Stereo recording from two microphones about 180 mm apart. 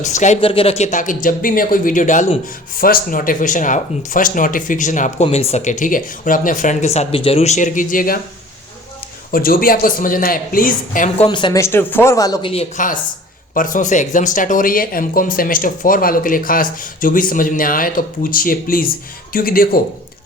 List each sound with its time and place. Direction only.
0.0 s speech: 40° left (ahead or behind)
9.3 s speech: 55° left (ahead or behind)
11.2 s speech: 25° left (ahead or behind)
11.6 s speech: 10° left (ahead or behind); by 12.6 s 30° left (ahead or behind)
12.7 s speech: 45° left (ahead or behind)